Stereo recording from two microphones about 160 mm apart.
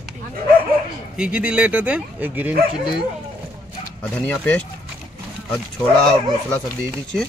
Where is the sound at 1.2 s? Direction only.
5° right (ahead or behind).